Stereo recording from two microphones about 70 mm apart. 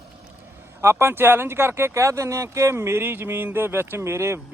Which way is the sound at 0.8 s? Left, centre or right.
Right.